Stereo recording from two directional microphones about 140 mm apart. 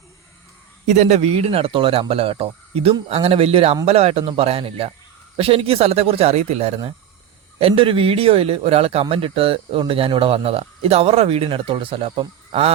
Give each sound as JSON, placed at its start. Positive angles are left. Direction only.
{"t": 0.9, "sound": "speech", "side_deg": -55}